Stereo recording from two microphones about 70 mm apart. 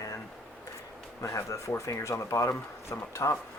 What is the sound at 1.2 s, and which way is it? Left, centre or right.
Speech, left.